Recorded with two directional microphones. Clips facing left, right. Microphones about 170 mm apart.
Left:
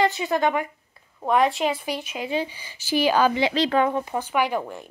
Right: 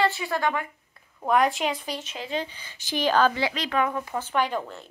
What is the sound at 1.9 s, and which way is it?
Speech, 15° left (ahead or behind).